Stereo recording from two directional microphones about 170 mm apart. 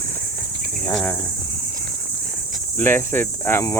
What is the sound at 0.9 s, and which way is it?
Cricket, 10° left (ahead or behind).